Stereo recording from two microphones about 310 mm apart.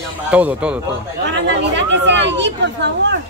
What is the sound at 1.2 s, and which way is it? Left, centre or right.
Speech, right.